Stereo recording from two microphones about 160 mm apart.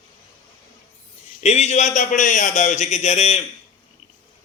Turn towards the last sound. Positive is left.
turn(degrees=45)  # may be behind; listen again after turning